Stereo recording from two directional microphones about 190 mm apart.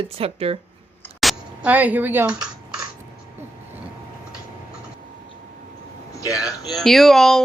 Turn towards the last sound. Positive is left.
turn(degrees=0)  # may be behind; listen again after turning